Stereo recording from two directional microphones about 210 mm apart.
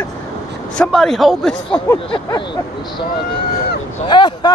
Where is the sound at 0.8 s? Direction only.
5° left (ahead or behind).